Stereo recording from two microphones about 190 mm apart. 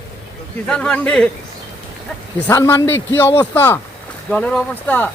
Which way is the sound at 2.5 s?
15° left (ahead or behind).